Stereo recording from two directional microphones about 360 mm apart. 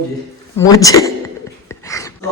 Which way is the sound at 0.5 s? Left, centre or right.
Centre.